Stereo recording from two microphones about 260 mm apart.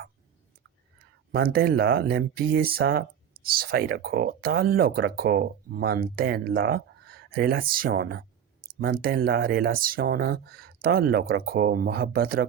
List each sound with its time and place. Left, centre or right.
1.3 s speech: right